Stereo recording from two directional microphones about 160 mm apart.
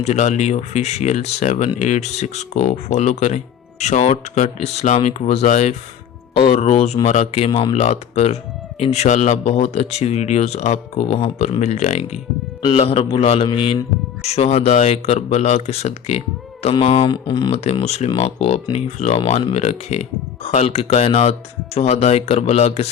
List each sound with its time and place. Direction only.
0.0 s a man's voice: 45° left (ahead or behind)
17.1 s speech: 30° left (ahead or behind)
17.5 s a man's voice: 40° left (ahead or behind)